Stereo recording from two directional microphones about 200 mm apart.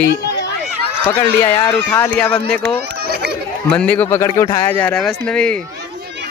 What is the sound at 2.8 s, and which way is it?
Speech, 50° right (ahead or behind).